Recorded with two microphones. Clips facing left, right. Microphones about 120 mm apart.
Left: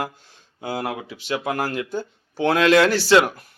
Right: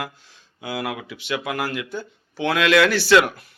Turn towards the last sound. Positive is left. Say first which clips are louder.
# even
turn(degrees=35)  # may be behind; listen again after turning